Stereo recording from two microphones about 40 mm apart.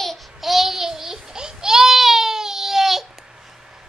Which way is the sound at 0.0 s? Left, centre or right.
Centre.